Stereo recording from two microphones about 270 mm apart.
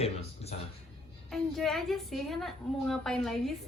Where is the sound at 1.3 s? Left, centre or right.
Centre.